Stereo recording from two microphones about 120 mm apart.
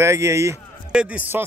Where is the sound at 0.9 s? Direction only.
10° right (ahead or behind).